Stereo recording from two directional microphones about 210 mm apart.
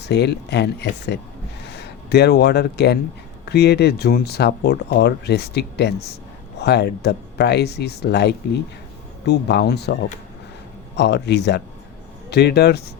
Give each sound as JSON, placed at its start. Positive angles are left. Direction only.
{"t": 0.0, "sound": "speech", "side_deg": 55}
{"t": 10.9, "sound": "speech", "side_deg": 55}